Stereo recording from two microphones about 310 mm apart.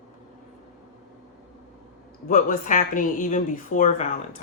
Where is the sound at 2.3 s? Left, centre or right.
Left.